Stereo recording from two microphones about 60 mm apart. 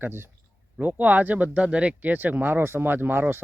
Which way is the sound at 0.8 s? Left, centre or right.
Right.